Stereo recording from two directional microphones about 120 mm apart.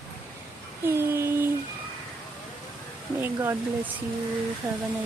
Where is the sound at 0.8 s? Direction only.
20° right (ahead or behind).